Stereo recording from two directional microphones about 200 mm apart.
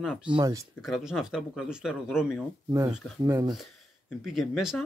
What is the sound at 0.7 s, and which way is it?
Speech, centre (ahead or behind).